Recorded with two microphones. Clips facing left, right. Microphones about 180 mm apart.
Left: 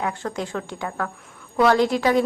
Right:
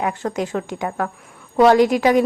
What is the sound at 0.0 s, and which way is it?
A woman's voice, 20° right (ahead or behind).